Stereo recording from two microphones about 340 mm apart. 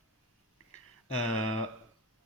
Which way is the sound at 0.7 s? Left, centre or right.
Centre.